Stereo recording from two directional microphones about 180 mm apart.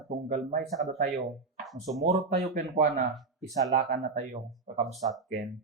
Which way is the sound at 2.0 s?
35° right (ahead or behind).